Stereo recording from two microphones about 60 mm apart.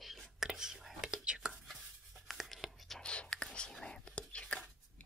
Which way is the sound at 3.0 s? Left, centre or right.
Centre.